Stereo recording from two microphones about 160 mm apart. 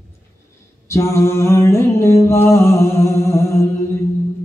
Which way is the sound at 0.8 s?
15° left (ahead or behind).